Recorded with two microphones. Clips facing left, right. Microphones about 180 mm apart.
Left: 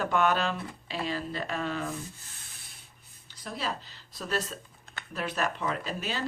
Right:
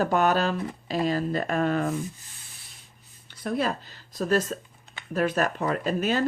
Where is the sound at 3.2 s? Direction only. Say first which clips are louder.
Right 8 dB; 55° right (ahead or behind).